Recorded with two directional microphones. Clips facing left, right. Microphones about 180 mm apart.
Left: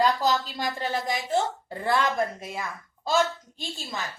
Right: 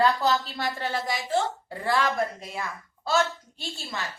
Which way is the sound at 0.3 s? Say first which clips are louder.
Even; 15° left (ahead or behind).